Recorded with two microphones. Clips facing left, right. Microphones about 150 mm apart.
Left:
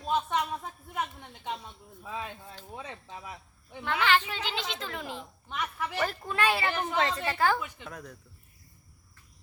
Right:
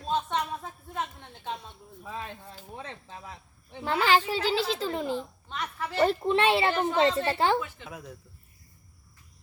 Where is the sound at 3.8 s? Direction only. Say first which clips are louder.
Right 3 dB; 35° right (ahead or behind).